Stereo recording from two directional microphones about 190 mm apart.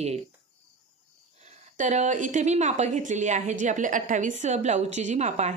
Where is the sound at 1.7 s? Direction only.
40° right (ahead or behind).